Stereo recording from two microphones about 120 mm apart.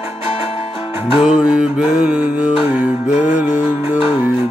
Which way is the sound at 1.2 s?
10° right (ahead or behind).